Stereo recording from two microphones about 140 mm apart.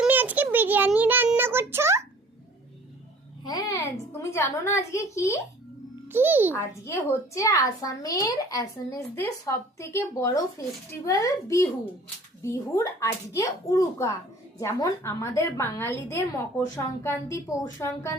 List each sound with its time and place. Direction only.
0.0 s a sound: 10° right (ahead or behind)
0.9 s child singing: 15° right (ahead or behind)
3.4 s a sound: 25° left (ahead or behind)
4.2 s a woman's voice: 20° left (ahead or behind)
6.1 s a child's voice: 15° right (ahead or behind)
6.5 s a child's voice: 20° left (ahead or behind)